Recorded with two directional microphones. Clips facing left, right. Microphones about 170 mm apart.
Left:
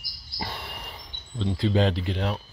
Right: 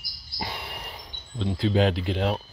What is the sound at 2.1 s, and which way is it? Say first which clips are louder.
Speech: right 3 dB; 20° right (ahead or behind).